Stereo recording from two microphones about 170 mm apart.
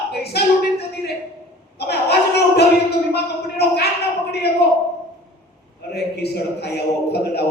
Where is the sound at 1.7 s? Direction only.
70° left (ahead or behind).